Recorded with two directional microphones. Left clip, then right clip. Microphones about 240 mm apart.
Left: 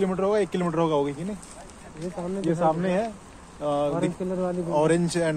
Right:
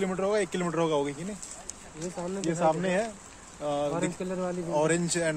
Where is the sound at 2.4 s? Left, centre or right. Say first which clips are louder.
Left 3 dB; centre.